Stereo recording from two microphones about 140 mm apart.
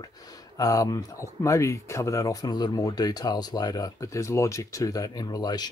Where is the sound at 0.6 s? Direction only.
25° left (ahead or behind).